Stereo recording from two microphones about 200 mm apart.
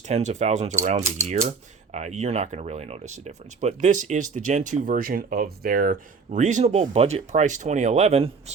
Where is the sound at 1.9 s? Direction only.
35° right (ahead or behind).